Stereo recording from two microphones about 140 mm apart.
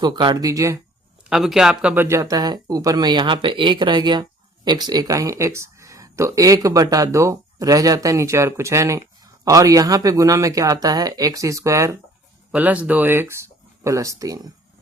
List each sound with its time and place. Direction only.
0.0 s speech: 30° right (ahead or behind)
1.3 s speech: centre (ahead or behind)
2.0 s speech: 25° right (ahead or behind)
12.5 s speech: 10° right (ahead or behind); by 14.5 s 25° right (ahead or behind)